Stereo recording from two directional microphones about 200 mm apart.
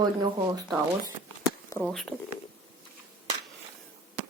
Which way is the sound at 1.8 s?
Centre (ahead or behind).